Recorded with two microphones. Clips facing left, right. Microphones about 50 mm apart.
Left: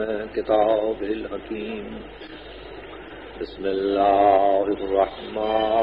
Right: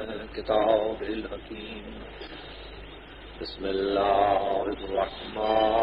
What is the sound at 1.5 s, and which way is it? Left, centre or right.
Speech, left.